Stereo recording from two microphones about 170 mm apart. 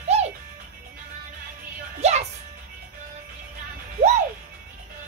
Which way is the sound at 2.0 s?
40° right (ahead or behind).